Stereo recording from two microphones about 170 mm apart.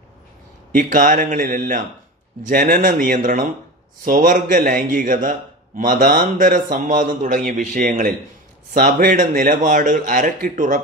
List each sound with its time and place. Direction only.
0.7 s a man's voice: 50° right (ahead or behind)